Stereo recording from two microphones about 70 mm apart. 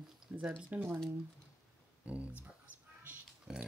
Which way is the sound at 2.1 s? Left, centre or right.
Centre.